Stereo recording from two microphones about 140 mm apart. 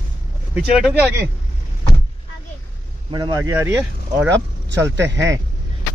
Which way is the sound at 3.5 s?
15° right (ahead or behind).